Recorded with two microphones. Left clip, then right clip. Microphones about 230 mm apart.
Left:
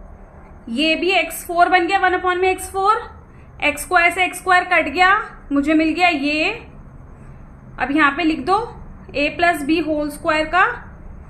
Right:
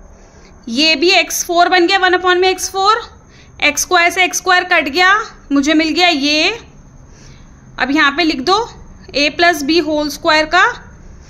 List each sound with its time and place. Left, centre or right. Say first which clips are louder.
0.7 s a woman's voice: right 6 dB; right
7.7 s a woman's voice: right 4 dB; right